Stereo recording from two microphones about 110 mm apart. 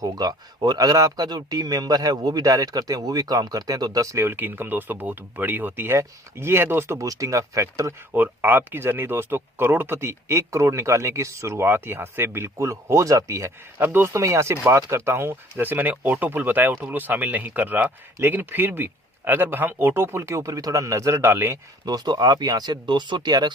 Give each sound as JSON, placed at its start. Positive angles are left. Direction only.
{"t": 0.0, "sound": "speech", "side_deg": -35}
{"t": 21.8, "sound": "speech", "side_deg": -40}